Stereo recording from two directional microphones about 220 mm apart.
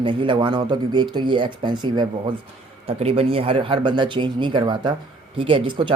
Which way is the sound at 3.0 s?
25° right (ahead or behind).